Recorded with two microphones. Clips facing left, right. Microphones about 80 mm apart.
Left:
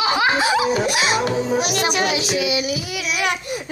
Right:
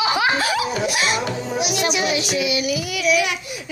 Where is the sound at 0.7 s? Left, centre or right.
Left.